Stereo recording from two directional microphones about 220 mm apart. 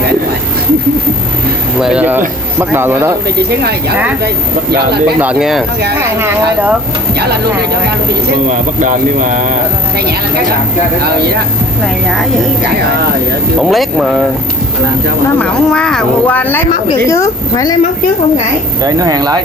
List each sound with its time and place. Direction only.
1.8 s speech: 5° right (ahead or behind)
4.7 s speech: 45° right (ahead or behind)
5.2 s speech: 5° right (ahead or behind)
8.8 s speech: 35° right (ahead or behind)
13.6 s speech: centre (ahead or behind)
15.3 s a woman's voice: 5° left (ahead or behind)
18.9 s speech: 15° right (ahead or behind)